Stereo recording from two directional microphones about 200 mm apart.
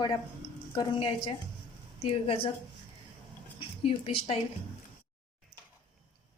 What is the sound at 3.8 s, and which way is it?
Speech, 25° left (ahead or behind).